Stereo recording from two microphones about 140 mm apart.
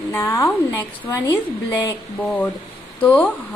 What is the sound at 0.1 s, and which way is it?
A woman's voice, 15° left (ahead or behind).